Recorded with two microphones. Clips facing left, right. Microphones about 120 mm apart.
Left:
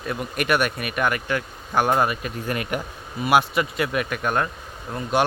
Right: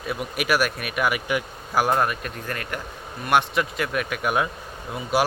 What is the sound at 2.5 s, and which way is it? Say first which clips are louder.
A man's voice: left 6 dB; 15° left (ahead or behind).